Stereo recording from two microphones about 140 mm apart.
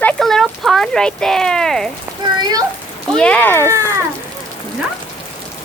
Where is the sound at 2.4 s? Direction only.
30° right (ahead or behind).